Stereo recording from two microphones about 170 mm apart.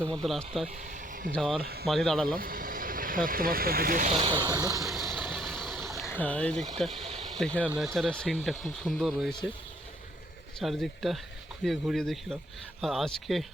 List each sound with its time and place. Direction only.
0.2 s speech: centre (ahead or behind)
1.6 s speech: 65° right (ahead or behind)
1.9 s speech: 5° left (ahead or behind)
2.2 s speech: 60° right (ahead or behind)
4.1 s speech: 35° right (ahead or behind)
4.4 s speech: 20° right (ahead or behind)
4.8 s vehicle: centre (ahead or behind)
6.1 s speech: 10° left (ahead or behind)
7.2 s a sound: centre (ahead or behind)
7.6 s speech: 10° right (ahead or behind)
7.9 s speech: 5° left (ahead or behind)
10.6 s speech: centre (ahead or behind)